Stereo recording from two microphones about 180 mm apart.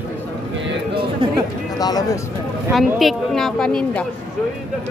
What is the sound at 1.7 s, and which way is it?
Speech, 20° left (ahead or behind).